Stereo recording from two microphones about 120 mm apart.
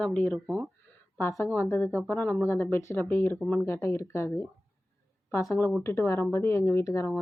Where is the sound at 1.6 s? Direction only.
20° left (ahead or behind).